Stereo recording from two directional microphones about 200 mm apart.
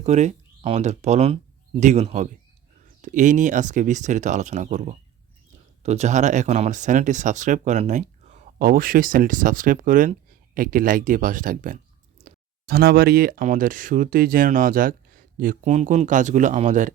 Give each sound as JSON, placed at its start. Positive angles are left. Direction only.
{"t": 0.0, "sound": "speech", "side_deg": -35}